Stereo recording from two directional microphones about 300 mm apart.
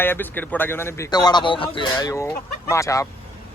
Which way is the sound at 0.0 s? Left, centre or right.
Centre.